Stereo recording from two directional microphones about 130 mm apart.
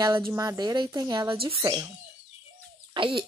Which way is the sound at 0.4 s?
30° right (ahead or behind).